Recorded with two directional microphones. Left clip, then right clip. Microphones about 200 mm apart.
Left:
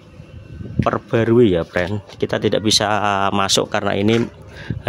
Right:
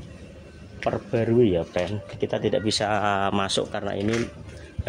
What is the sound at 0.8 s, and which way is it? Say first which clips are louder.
Speech: left 7 dB; 35° left (ahead or behind).